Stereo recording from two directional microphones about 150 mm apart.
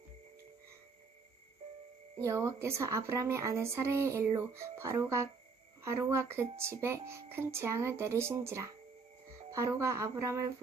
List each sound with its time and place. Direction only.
2.2 s speech: 20° right (ahead or behind)